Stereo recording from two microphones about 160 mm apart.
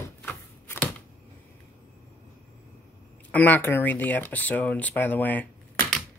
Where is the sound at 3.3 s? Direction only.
10° left (ahead or behind).